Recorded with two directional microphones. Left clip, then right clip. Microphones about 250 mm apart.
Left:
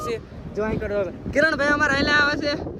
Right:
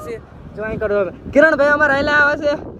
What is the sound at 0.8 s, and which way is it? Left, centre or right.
Speech, centre.